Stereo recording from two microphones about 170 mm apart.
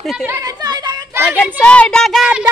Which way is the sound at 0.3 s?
20° right (ahead or behind).